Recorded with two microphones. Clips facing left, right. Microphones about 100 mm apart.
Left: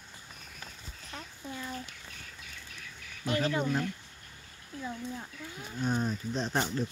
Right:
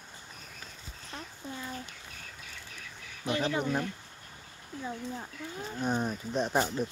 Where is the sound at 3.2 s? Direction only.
20° right (ahead or behind).